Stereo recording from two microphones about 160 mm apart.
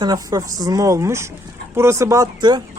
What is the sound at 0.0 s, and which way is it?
Speech, 25° right (ahead or behind).